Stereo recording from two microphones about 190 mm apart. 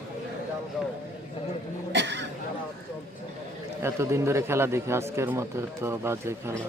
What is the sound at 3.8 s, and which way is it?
Speech, 15° right (ahead or behind).